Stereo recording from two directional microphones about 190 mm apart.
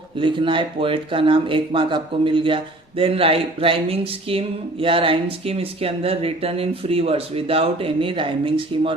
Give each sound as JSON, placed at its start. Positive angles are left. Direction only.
{"t": 0.2, "sound": "speech", "side_deg": -25}